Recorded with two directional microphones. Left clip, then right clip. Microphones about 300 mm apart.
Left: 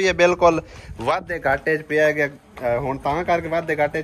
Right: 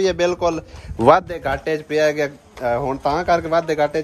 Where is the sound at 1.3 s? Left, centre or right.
Centre.